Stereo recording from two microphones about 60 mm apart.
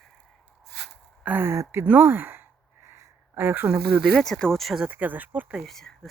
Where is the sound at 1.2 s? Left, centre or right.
Right.